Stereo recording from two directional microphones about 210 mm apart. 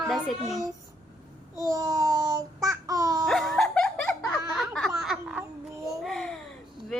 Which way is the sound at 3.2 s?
Centre (ahead or behind).